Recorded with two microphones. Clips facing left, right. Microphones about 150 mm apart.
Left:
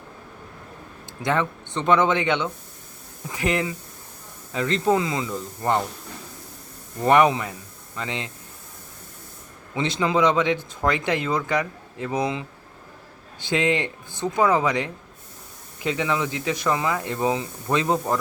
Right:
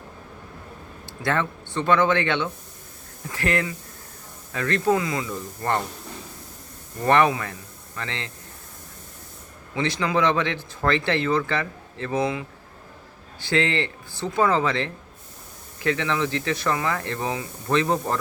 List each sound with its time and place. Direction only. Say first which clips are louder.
1.0 s speech: left 1 dB; 15° left (ahead or behind)
7.0 s speech: left 2 dB; 15° left (ahead or behind)
9.7 s speech: left 1 dB; 20° left (ahead or behind)